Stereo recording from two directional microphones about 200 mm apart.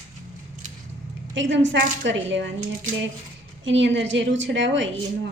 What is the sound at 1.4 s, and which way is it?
A woman's voice, 65° right (ahead or behind).